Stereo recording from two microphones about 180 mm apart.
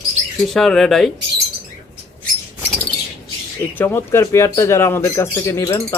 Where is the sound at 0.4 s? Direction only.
Centre (ahead or behind).